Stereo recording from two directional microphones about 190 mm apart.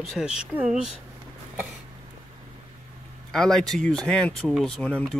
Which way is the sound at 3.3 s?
Centre (ahead or behind).